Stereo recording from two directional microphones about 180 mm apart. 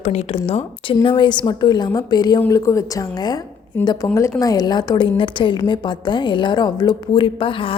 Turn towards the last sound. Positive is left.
turn(degrees=30)  # may be behind; listen again after turning